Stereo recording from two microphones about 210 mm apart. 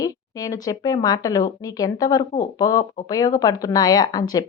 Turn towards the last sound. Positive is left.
turn(degrees=20)  # may be behind; listen again after turning